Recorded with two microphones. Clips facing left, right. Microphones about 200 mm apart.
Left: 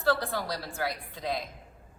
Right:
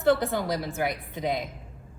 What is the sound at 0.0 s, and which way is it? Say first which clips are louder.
A woman's voice: right 5 dB; 20° right (ahead or behind).